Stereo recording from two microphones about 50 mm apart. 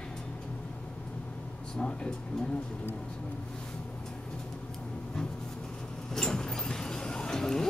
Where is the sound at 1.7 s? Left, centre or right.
Centre.